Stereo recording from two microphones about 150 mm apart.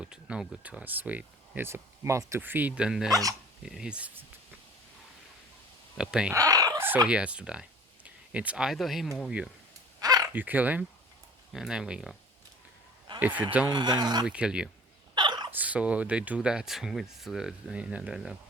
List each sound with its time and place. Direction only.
0.0 s speech: 5° right (ahead or behind)
3.1 s speech: 20° right (ahead or behind)
3.6 s speech: 5° right (ahead or behind)
6.0 s speech: 5° right (ahead or behind)
6.3 s fowl: 25° right (ahead or behind)
7.1 s speech: 5° right (ahead or behind)
10.0 s bow-wow: 25° right (ahead or behind)
10.3 s speech: 10° right (ahead or behind)
13.1 s speech: 10° right (ahead or behind)
13.7 s speech: 30° right (ahead or behind)
14.3 s speech: 5° right (ahead or behind)
15.1 s a sound: 30° right (ahead or behind)
15.5 s speech: 10° right (ahead or behind)